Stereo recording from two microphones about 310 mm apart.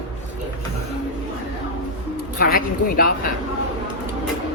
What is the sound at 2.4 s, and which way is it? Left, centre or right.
Speech, left.